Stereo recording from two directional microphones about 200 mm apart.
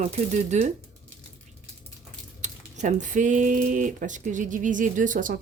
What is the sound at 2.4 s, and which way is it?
Speech, 35° right (ahead or behind).